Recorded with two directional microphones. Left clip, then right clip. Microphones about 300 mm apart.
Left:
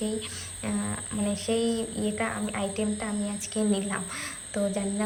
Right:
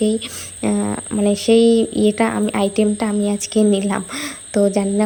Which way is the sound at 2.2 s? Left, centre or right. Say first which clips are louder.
Right 12 dB; right.